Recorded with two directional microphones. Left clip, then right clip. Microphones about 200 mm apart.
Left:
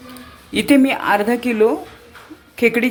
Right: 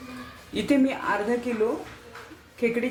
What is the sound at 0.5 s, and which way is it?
Speech, 50° left (ahead or behind).